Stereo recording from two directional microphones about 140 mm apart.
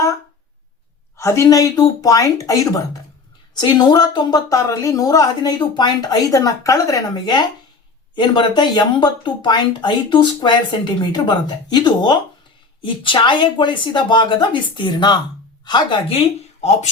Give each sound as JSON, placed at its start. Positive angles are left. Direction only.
{"t": 1.1, "sound": "a woman's voice", "side_deg": 20}